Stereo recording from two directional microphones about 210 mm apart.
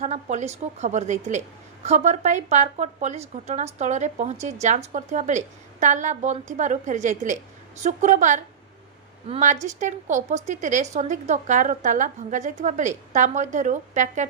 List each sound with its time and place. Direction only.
0.0 s a woman's voice: 35° right (ahead or behind)